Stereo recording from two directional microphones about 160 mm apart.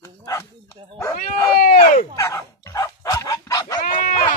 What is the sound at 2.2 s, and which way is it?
Dog, 20° left (ahead or behind).